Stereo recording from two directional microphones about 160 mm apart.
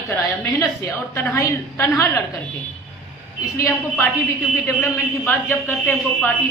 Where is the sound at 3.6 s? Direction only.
15° left (ahead or behind).